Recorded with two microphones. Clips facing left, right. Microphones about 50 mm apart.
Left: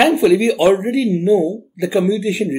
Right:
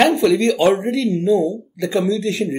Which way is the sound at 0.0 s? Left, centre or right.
Centre.